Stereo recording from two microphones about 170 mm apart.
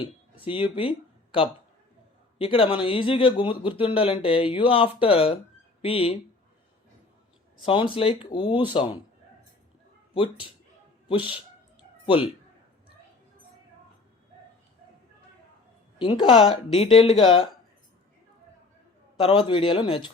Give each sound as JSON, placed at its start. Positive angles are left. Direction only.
{"t": 0.0, "sound": "speech", "side_deg": 30}
{"t": 7.6, "sound": "speech", "side_deg": 30}
{"t": 12.0, "sound": "speech", "side_deg": 30}
{"t": 16.0, "sound": "speech", "side_deg": 30}
{"t": 19.2, "sound": "speech", "side_deg": 30}